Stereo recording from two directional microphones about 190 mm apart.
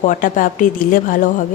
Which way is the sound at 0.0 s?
45° left (ahead or behind).